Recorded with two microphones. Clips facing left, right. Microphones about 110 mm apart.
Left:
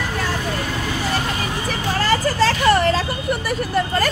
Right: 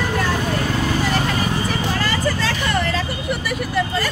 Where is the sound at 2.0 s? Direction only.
40° left (ahead or behind).